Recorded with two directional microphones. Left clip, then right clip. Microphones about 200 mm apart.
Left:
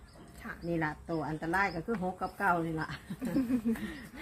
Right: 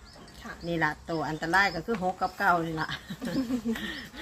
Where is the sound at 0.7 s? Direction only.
10° right (ahead or behind).